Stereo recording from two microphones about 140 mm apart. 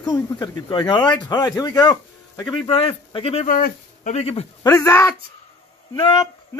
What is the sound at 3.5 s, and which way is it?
Speech, 75° left (ahead or behind).